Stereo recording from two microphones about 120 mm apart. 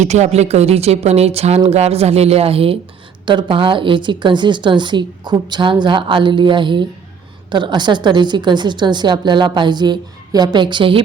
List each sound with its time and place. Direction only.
0.0 s a woman's voice: 70° right (ahead or behind); by 11.0 s 45° right (ahead or behind)